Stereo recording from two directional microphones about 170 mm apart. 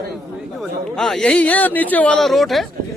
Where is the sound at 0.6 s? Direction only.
Centre (ahead or behind).